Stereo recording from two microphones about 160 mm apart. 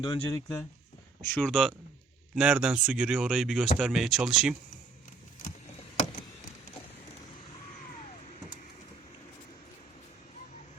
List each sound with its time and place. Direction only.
0.0 s speech: 25° left (ahead or behind)
1.2 s speech: 10° left (ahead or behind)